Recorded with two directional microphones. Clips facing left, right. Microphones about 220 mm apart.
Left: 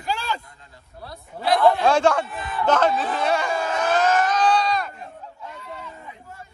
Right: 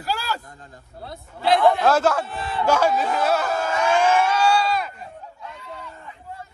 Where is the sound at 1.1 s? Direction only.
25° right (ahead or behind).